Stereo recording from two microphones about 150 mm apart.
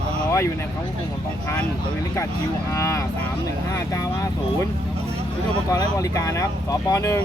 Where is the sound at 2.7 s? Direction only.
20° left (ahead or behind).